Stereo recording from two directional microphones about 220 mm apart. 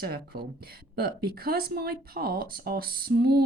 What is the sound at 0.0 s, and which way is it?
A woman's voice, 45° right (ahead or behind).